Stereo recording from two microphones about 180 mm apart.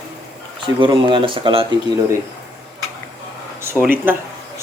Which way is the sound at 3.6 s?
15° right (ahead or behind).